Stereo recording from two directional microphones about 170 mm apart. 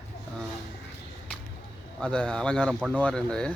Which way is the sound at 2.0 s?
5° left (ahead or behind).